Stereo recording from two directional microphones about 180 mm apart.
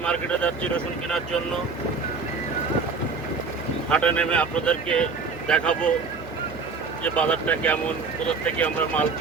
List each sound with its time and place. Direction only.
0.0 s speech: 5° left (ahead or behind)
3.8 s speech: 5° left (ahead or behind)
7.0 s speech: 5° left (ahead or behind)